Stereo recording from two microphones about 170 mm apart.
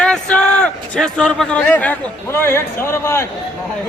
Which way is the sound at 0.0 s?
5° left (ahead or behind).